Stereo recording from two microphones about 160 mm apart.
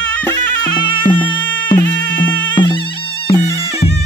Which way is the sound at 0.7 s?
30° left (ahead or behind).